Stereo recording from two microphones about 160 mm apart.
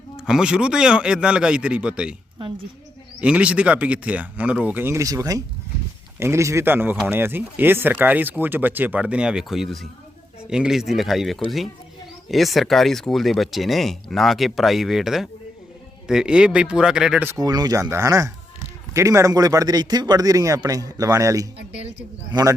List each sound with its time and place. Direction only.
0.2 s speech: 5° right (ahead or behind)
3.2 s speech: 5° right (ahead or behind)
17.3 s speech: 25° right (ahead or behind)